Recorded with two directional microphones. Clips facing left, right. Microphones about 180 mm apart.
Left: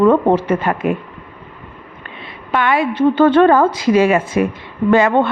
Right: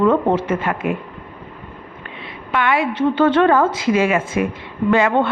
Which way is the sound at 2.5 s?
40° left (ahead or behind).